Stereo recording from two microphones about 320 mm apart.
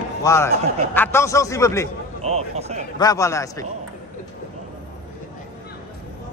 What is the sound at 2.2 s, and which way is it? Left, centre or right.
Speech, centre.